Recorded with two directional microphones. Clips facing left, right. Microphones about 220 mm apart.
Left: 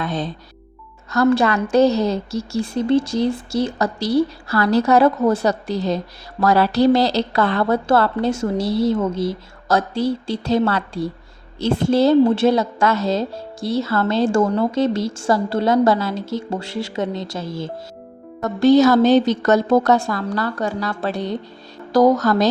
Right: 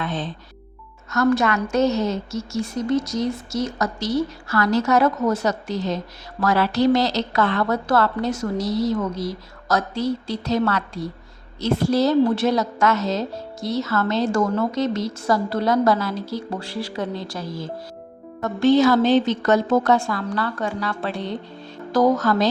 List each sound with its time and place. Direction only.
0.0 s a woman's voice: 40° left (ahead or behind)
18.3 s speech: 40° left (ahead or behind)